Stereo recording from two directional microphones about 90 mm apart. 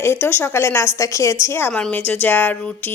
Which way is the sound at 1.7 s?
10° left (ahead or behind).